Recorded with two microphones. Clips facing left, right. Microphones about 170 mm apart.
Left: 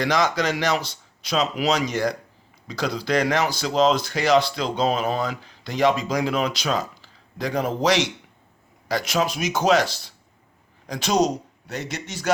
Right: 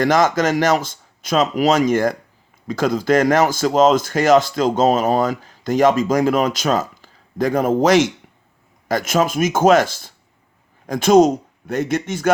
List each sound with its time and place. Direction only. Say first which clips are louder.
0.0 s a man's voice: right 6 dB; 50° right (ahead or behind)